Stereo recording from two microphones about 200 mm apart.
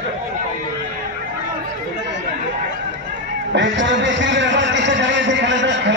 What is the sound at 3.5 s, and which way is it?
A man's voice, 65° right (ahead or behind).